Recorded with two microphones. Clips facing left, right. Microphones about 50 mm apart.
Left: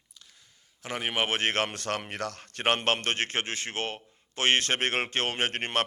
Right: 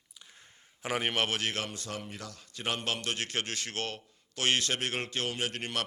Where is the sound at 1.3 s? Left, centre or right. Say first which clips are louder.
Left 6 dB; left.